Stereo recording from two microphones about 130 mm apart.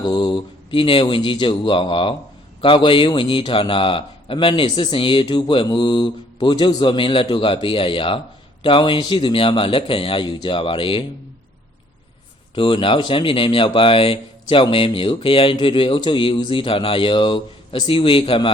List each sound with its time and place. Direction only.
0.1 s speech: 40° left (ahead or behind)
12.5 s speech: 40° left (ahead or behind)